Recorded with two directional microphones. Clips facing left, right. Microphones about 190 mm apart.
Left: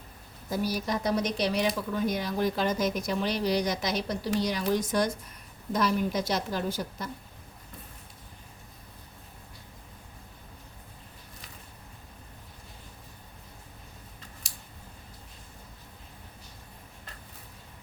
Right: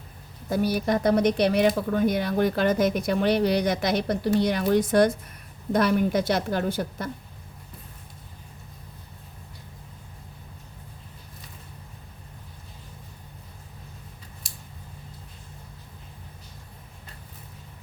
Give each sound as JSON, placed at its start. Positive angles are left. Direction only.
{"t": 0.5, "sound": "speech", "side_deg": -60}